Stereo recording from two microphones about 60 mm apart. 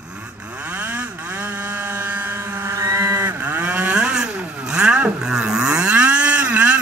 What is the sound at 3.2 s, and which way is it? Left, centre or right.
Vehicle, right.